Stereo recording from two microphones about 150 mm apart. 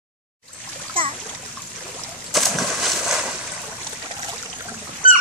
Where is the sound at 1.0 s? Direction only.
35° right (ahead or behind).